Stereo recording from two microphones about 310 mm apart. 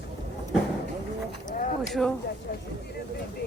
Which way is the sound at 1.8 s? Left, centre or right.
Centre.